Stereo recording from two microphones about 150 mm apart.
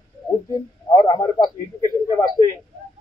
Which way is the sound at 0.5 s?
25° left (ahead or behind).